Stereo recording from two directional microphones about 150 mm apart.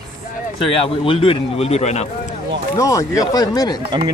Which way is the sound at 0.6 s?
35° left (ahead or behind).